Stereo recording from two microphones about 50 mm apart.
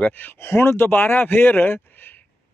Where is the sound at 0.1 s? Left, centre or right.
Left.